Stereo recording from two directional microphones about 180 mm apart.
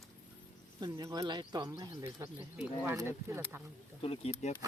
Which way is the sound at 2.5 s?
10° right (ahead or behind).